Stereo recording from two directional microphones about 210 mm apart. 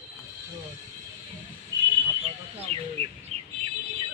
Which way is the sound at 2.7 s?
30° right (ahead or behind).